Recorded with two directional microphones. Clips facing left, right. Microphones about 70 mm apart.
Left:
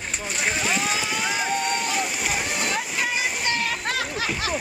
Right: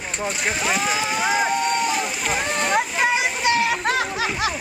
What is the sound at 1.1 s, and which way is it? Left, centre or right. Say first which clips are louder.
Speech: right 5 dB; right.